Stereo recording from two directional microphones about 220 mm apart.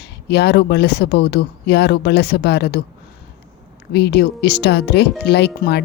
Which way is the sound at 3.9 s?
50° left (ahead or behind).